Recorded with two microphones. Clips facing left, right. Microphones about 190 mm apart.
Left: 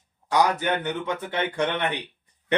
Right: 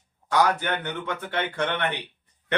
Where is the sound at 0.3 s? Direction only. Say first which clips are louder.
Left 1 dB; 15° left (ahead or behind).